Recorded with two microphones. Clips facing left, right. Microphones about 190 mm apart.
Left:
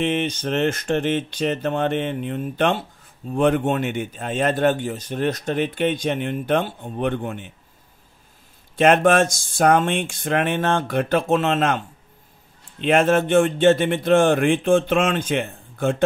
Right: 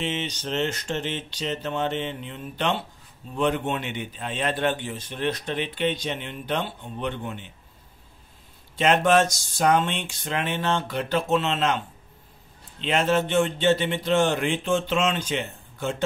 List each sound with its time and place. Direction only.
0.0 s a man's voice: 55° left (ahead or behind)
8.7 s a man's voice: 55° left (ahead or behind)
12.8 s a man's voice: 50° left (ahead or behind)